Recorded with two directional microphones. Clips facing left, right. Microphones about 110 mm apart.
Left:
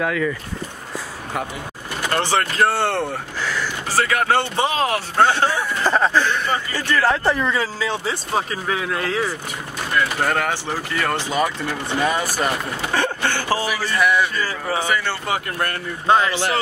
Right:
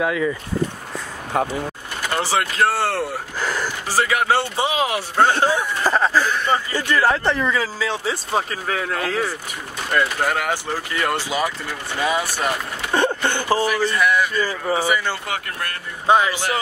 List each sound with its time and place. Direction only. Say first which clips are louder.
0.0 s speech: right 1 dB; 10° right (ahead or behind)
2.0 s speech: left 1 dB; 5° right (ahead or behind)
3.3 s speech: right 2 dB; 45° right (ahead or behind)
3.9 s speech: even; 10° right (ahead or behind)
5.9 s speech: left 1 dB; centre (ahead or behind)
6.7 s speech: left 2 dB; 15° right (ahead or behind)
7.2 s speech: even; centre (ahead or behind)
12.9 s speech: right 3 dB; 20° right (ahead or behind)
13.7 s speech: right 1 dB; 5° left (ahead or behind)
14.4 s speech: right 2 dB; 15° right (ahead or behind)